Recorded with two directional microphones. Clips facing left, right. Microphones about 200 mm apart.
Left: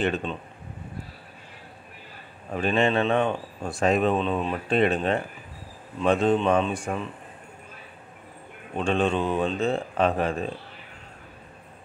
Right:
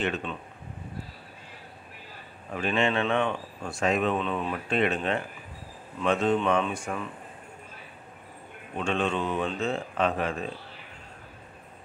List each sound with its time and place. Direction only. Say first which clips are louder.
0.0 s speech: left 4 dB; 35° left (ahead or behind)
2.5 s speech: left 4 dB; 35° left (ahead or behind)
8.7 s speech: left 4 dB; 35° left (ahead or behind)